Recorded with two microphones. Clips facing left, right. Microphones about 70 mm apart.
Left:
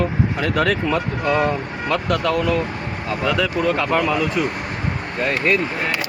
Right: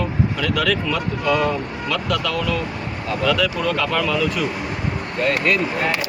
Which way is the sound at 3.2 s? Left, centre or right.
Left.